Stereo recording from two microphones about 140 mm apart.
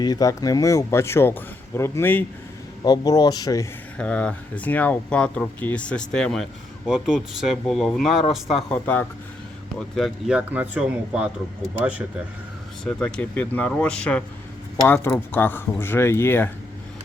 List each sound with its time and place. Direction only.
0.0 s speech: 25° left (ahead or behind)
2.8 s speech: 30° left (ahead or behind)
3.9 s speech: 10° left (ahead or behind)
9.9 s speech: centre (ahead or behind)
12.8 s speech: 5° left (ahead or behind)